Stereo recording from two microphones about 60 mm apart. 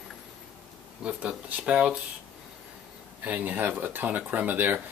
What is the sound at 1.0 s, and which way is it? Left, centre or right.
Speech, centre.